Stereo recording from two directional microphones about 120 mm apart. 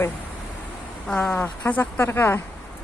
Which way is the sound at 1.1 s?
15° left (ahead or behind).